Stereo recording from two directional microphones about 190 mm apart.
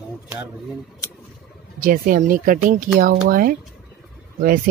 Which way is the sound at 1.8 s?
45° right (ahead or behind).